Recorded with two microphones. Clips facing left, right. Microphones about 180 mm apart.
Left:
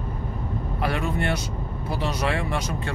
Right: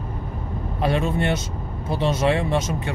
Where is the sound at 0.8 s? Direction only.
25° right (ahead or behind).